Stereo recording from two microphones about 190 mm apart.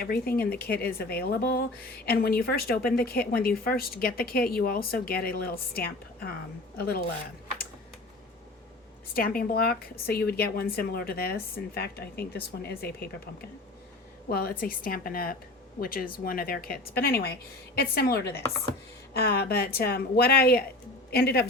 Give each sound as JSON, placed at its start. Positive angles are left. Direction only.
{"t": 0.0, "sound": "a woman's voice", "side_deg": 50}
{"t": 9.1, "sound": "a woman's voice", "side_deg": 50}